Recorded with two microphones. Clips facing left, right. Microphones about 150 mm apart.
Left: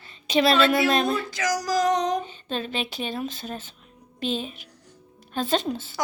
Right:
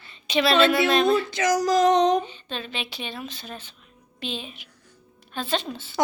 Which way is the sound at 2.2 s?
45° left (ahead or behind).